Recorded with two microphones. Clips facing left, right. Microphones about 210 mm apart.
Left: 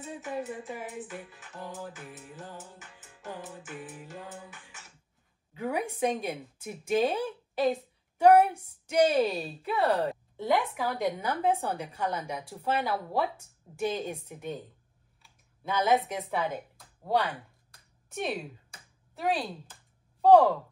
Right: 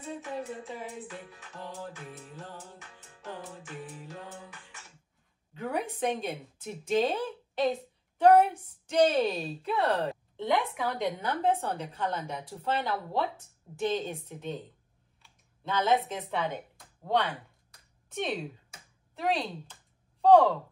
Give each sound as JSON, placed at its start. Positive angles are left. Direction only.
{"t": 0.0, "sound": "music", "side_deg": 5}
{"t": 5.5, "sound": "a woman's voice", "side_deg": 10}
{"t": 15.2, "sound": "computer keyboard", "side_deg": 10}